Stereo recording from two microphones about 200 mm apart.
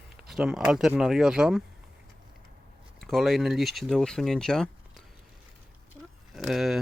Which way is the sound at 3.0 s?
Centre (ahead or behind).